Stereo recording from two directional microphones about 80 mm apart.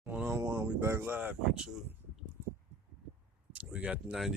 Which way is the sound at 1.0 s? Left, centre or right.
Right.